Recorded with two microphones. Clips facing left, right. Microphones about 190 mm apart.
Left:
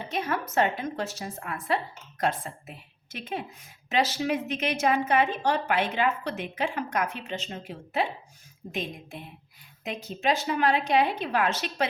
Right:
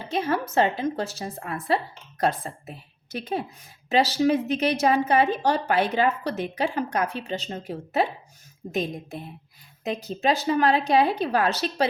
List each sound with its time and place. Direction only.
0.1 s a woman's voice: 30° right (ahead or behind)